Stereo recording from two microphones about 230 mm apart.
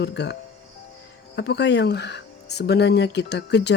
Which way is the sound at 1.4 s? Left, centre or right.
Left.